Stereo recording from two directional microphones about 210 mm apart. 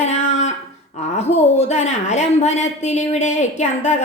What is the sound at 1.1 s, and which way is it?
A woman's voice, 30° left (ahead or behind).